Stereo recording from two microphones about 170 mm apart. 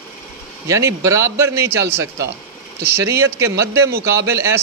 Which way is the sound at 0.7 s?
15° right (ahead or behind).